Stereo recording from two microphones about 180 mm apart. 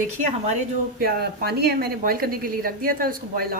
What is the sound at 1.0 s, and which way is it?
Speech, 60° right (ahead or behind).